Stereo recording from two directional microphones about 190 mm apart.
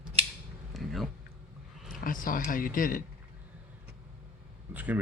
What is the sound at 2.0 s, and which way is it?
Speech, 45° left (ahead or behind).